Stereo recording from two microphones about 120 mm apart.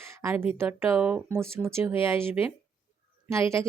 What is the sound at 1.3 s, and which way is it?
Speech, 20° right (ahead or behind).